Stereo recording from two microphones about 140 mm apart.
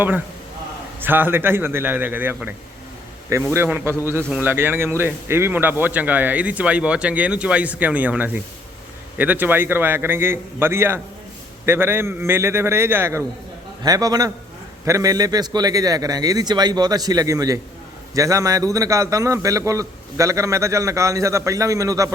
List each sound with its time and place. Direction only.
1.0 s speech: 15° right (ahead or behind)
3.5 s a man's voice: 15° right (ahead or behind)